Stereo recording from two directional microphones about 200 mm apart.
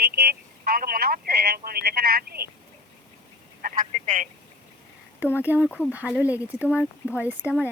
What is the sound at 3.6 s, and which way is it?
Speech, 40° right (ahead or behind).